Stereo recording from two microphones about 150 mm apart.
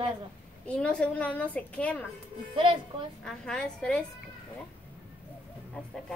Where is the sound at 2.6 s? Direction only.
35° right (ahead or behind).